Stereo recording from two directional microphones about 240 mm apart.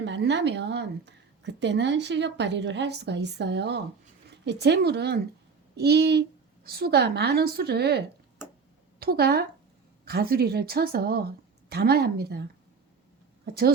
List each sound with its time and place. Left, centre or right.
0.0 s a woman's voice: right